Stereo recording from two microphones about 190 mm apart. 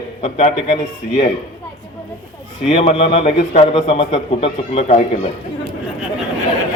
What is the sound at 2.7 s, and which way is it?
A man's voice, 30° left (ahead or behind).